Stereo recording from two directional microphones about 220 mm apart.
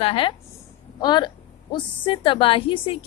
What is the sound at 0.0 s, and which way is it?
A woman's voice, 25° left (ahead or behind).